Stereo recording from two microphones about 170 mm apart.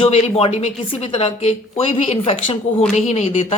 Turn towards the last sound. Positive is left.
turn(degrees=40)  # may be behind; listen again after turning